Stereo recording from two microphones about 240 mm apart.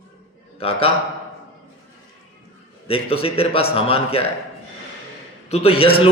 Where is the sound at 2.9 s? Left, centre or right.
Left.